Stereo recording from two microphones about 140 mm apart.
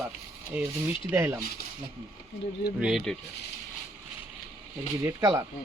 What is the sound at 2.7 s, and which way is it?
Speech, 5° right (ahead or behind).